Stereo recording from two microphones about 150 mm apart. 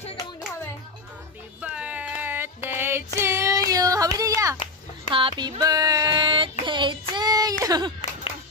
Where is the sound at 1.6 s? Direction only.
10° right (ahead or behind).